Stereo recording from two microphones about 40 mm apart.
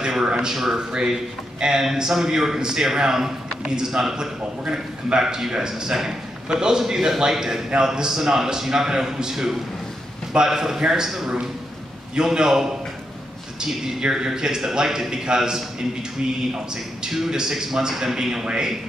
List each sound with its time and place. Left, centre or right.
0.0 s a man's voice: centre
0.7 s a man's voice: centre
12.2 s a man's voice: centre
13.9 s a man's voice: centre
17.1 s a man's voice: centre